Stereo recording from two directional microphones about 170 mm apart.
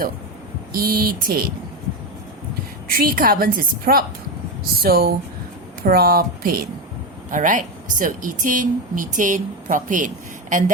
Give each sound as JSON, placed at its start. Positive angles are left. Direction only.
{"t": 0.7, "sound": "a woman's voice", "side_deg": -60}
{"t": 2.9, "sound": "a woman's voice", "side_deg": -60}
{"t": 7.3, "sound": "a woman's voice", "side_deg": -50}